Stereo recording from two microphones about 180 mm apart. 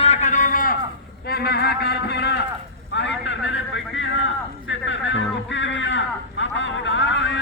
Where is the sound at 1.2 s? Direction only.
60° left (ahead or behind).